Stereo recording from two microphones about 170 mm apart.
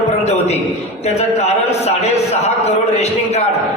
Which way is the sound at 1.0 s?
40° left (ahead or behind).